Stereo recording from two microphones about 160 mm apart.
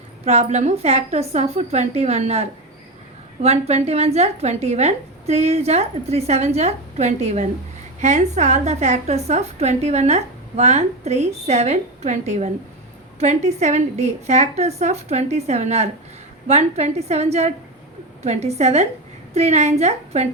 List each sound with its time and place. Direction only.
0.3 s a woman's voice: 45° right (ahead or behind)